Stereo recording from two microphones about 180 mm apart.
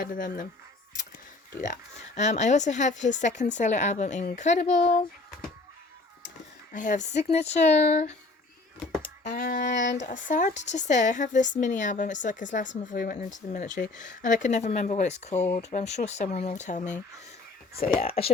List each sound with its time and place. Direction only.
0.0 s a woman's voice: 50° left (ahead or behind)
2.1 s speech: 40° left (ahead or behind)
6.7 s speech: 45° left (ahead or behind)
9.3 s a woman's voice: 45° left (ahead or behind)
9.6 s speech: 80° left
10.1 s a woman's voice: 45° left (ahead or behind)
18.0 s speech: 30° left (ahead or behind)